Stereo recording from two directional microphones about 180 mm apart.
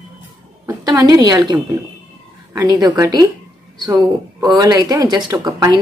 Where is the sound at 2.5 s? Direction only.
20° right (ahead or behind).